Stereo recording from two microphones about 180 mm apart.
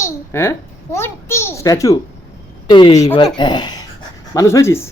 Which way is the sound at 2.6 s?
25° left (ahead or behind).